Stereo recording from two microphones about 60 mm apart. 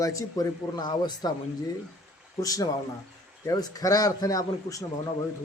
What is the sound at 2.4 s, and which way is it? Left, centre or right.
Speech, left.